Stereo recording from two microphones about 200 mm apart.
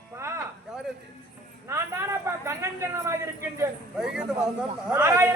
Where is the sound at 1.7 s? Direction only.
15° right (ahead or behind).